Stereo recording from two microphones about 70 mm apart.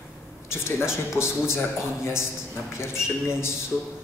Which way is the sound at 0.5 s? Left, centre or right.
Left.